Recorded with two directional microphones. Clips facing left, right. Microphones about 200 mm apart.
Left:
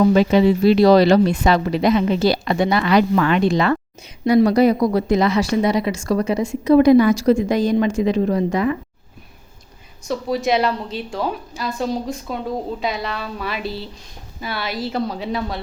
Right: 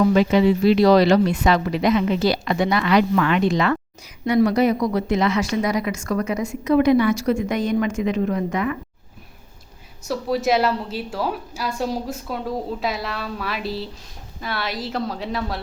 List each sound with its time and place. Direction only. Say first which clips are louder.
0.1 s a woman's voice: left 2 dB; 35° left (ahead or behind)
10.1 s a woman's voice: left 1 dB; centre (ahead or behind)